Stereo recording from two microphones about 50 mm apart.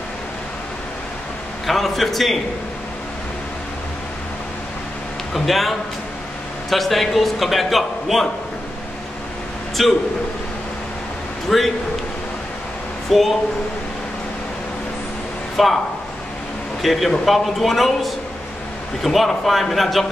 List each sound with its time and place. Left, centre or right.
1.7 s a man's voice: centre
5.3 s a man's voice: centre
9.8 s a man's voice: centre
11.4 s a man's voice: centre
13.1 s a man's voice: centre
15.5 s speech: centre
16.8 s a man's voice: centre